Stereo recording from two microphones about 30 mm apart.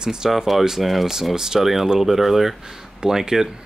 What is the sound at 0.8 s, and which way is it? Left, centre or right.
Speech, centre.